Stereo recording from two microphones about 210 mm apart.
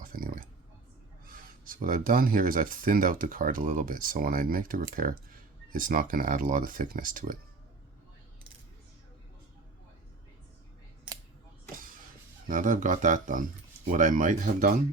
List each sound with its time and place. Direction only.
0.0 s a sound: 45° right (ahead or behind)
1.2 s speech: 40° right (ahead or behind)
12.5 s speech: 40° right (ahead or behind)